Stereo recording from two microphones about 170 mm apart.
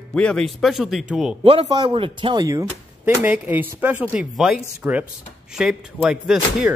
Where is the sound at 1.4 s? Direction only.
30° right (ahead or behind).